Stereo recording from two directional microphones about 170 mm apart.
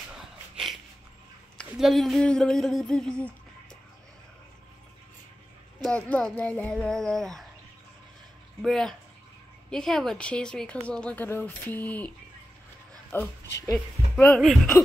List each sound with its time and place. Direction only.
1.7 s speech: centre (ahead or behind)
5.8 s speech: 5° left (ahead or behind)
8.6 s speech: 5° left (ahead or behind)
13.1 s speech: 15° left (ahead or behind)